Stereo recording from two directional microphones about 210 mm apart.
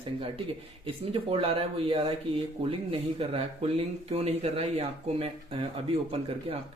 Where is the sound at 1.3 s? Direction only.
25° right (ahead or behind).